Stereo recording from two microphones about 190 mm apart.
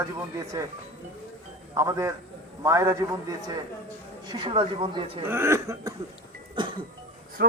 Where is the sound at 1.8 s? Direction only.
15° right (ahead or behind).